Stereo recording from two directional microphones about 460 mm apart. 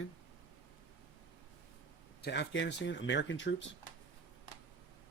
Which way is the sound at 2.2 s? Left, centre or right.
Left.